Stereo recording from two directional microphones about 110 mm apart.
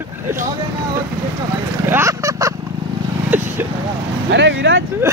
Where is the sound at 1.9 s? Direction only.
25° right (ahead or behind).